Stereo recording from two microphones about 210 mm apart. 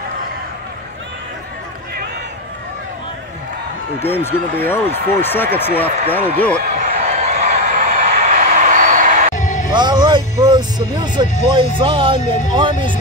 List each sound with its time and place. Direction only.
4.0 s speech: 10° left (ahead or behind)
7.1 s a sound: 30° right (ahead or behind)
9.3 s music: 35° left (ahead or behind)
9.7 s music: 20° right (ahead or behind)
11.5 s speech: 25° right (ahead or behind)
12.2 s speech: 35° left (ahead or behind)